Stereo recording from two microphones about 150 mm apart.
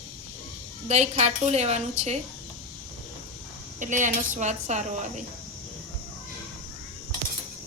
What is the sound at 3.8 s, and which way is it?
A woman's voice, 55° right (ahead or behind).